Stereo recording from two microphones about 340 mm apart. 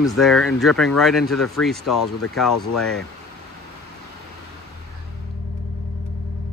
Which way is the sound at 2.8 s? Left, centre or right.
Centre.